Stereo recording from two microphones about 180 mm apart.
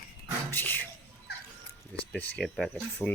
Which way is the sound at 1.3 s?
65° left (ahead or behind).